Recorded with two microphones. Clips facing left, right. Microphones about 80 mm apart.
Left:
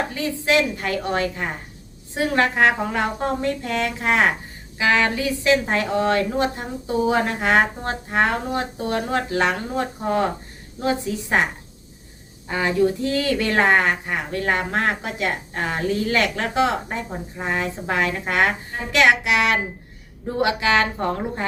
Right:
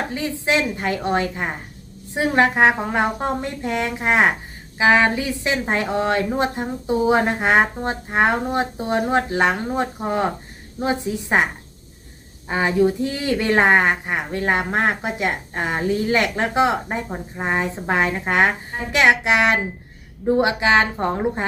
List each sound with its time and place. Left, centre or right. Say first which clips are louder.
0.1 s speech: left 1 dB; right
12.5 s speech: right 2 dB; right